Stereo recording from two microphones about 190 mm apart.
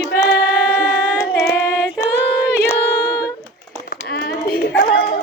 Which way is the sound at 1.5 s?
60° left (ahead or behind).